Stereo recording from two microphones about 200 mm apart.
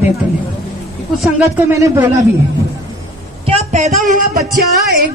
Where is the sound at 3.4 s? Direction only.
35° right (ahead or behind).